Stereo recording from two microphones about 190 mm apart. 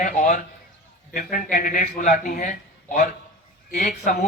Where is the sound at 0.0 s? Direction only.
45° left (ahead or behind).